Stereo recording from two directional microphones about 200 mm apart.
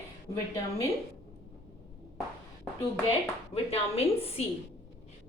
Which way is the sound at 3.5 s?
30° left (ahead or behind).